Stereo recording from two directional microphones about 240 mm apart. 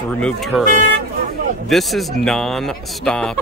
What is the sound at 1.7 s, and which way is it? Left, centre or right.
Speech, centre.